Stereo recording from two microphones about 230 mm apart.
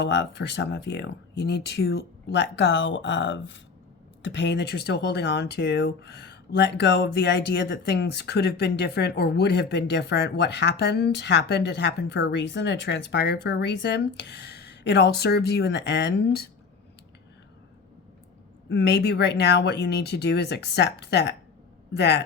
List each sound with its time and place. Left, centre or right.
0.0 s speech: left
18.7 s speech: left